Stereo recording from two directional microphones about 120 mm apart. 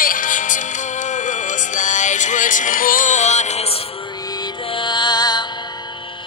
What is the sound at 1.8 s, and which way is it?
Music, 90° left.